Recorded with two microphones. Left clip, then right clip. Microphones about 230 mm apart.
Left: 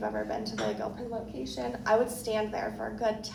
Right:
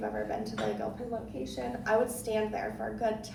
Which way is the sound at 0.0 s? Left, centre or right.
Left.